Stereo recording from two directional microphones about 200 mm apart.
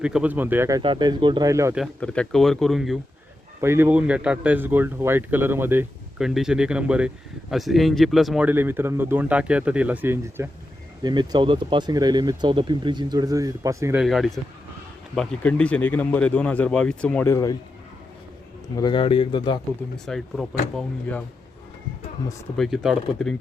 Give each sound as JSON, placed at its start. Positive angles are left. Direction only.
{"t": 0.0, "sound": "speech", "side_deg": -5}
{"t": 0.8, "sound": "speech", "side_deg": -25}
{"t": 1.7, "sound": "speech", "side_deg": 0}
{"t": 3.6, "sound": "speech", "side_deg": -10}
{"t": 11.0, "sound": "speech", "side_deg": -20}
{"t": 14.0, "sound": "a man's voice", "side_deg": 0}
{"t": 18.8, "sound": "a man's voice", "side_deg": 25}
{"t": 20.1, "sound": "speech", "side_deg": 0}
{"t": 22.5, "sound": "speech", "side_deg": 0}